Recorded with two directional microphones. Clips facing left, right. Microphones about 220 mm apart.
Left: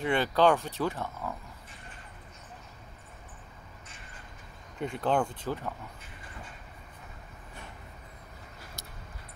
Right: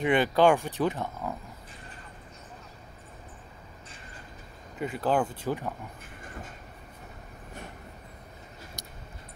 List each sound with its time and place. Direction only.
0.0 s speech: 15° right (ahead or behind)
4.7 s speech: 5° right (ahead or behind)
8.8 s a sound: 20° right (ahead or behind)